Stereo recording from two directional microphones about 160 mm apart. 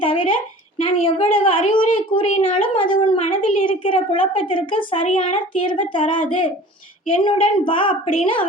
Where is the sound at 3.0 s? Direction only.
45° left (ahead or behind).